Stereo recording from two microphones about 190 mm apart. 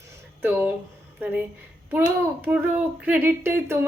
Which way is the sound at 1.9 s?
10° right (ahead or behind).